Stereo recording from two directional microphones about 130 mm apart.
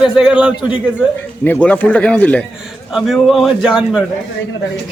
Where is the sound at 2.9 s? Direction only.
Centre (ahead or behind).